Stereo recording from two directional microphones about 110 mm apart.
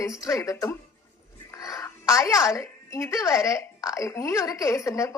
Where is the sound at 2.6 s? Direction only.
25° left (ahead or behind).